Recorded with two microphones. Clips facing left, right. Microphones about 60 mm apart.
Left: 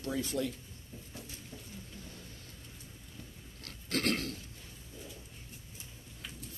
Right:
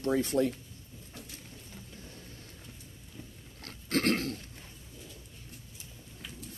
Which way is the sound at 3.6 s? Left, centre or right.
Right.